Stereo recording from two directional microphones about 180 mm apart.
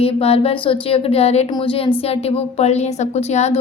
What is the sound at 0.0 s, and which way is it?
A woman's voice, 35° left (ahead or behind).